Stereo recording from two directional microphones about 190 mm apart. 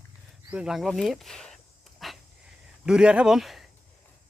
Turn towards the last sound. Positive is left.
turn(degrees=0)  # may be behind; listen again after turning